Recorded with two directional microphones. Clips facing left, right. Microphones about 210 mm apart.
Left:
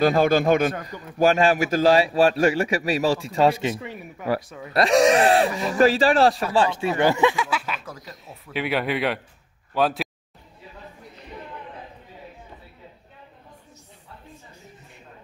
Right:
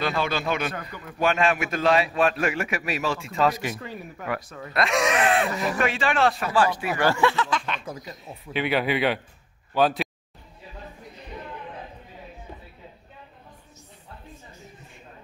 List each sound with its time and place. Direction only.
0.0 s a man's voice: 45° left (ahead or behind); by 3.7 s 30° left (ahead or behind)
4.4 s speech: 10° left (ahead or behind)
4.7 s a man's voice: 35° left (ahead or behind); by 10.0 s centre (ahead or behind)